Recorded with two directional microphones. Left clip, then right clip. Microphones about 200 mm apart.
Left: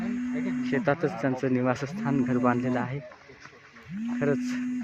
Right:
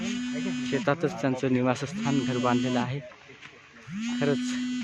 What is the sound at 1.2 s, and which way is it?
Speech, 5° right (ahead or behind).